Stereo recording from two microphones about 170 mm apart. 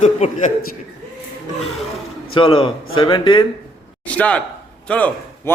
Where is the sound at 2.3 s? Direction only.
30° left (ahead or behind).